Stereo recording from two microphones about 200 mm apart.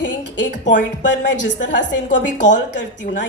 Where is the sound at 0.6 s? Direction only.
40° left (ahead or behind).